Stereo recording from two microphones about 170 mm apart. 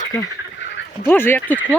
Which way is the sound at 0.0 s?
20° left (ahead or behind).